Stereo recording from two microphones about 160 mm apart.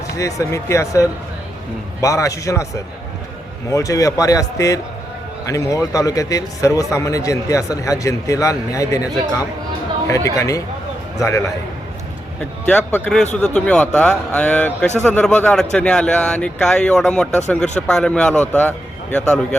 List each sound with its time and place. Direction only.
0.2 s speech: 20° left (ahead or behind)
10.1 s speech: 20° left (ahead or behind)
12.6 s a man's voice: 5° left (ahead or behind)